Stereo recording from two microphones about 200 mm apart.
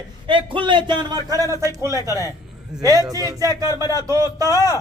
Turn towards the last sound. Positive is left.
turn(degrees=15)  # may be behind; listen again after turning